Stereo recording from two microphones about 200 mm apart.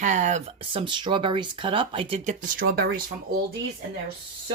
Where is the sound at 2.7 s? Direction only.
50° right (ahead or behind).